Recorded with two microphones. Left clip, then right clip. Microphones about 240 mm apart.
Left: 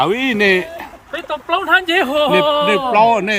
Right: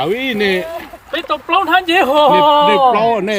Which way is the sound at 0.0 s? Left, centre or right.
Centre.